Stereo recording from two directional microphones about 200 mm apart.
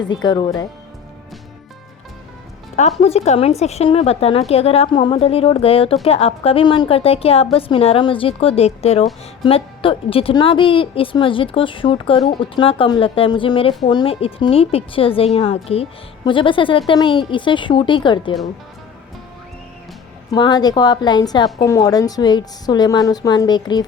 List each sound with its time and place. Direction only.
0.0 s a woman's voice: 20° left (ahead or behind)
3.0 s a woman's voice: 30° left (ahead or behind)
20.3 s a woman's voice: 20° left (ahead or behind)